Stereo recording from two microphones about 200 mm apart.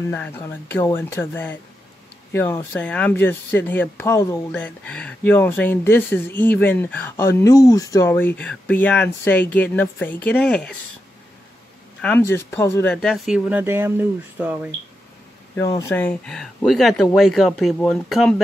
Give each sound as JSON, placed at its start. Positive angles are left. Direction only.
{"t": 0.1, "sound": "speech", "side_deg": 10}
{"t": 12.0, "sound": "speech", "side_deg": 10}
{"t": 15.5, "sound": "speech", "side_deg": 15}